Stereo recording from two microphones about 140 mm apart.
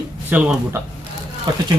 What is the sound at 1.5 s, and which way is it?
Speech, 30° right (ahead or behind).